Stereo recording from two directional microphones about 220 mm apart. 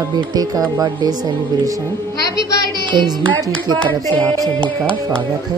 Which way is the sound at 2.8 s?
20° right (ahead or behind).